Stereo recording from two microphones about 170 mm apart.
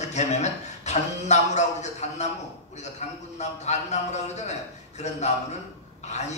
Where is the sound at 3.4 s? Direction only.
40° left (ahead or behind).